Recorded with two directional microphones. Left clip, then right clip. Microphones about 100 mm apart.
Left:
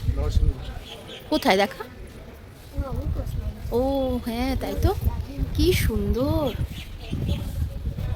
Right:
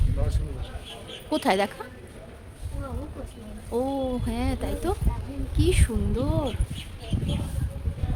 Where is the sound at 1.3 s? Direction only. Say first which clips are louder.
Left 3 dB; 20° left (ahead or behind).